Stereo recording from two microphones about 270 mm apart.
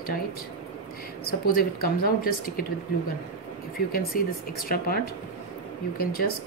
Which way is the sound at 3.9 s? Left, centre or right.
Left.